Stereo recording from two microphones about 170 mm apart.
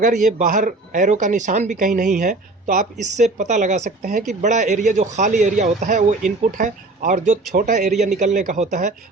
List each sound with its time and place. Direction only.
0.0 s speech: 50° right (ahead or behind)